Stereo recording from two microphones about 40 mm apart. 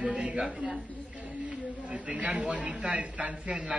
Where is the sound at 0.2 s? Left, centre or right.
Right.